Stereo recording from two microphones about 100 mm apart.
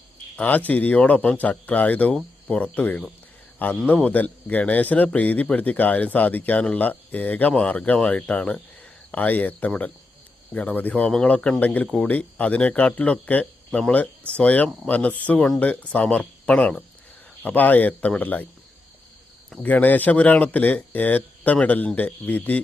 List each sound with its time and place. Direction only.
0.3 s a man's voice: 15° left (ahead or behind)
19.6 s a man's voice: 15° left (ahead or behind)